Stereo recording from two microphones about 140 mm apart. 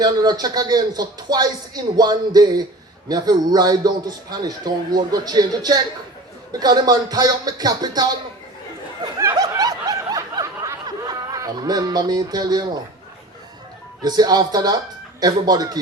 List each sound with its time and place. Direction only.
0.0 s a man's voice: 30° right (ahead or behind)
9.1 s snicker: 25° right (ahead or behind)
14.0 s a man's voice: 30° right (ahead or behind)